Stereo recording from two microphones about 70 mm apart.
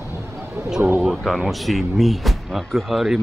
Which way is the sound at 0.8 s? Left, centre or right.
Right.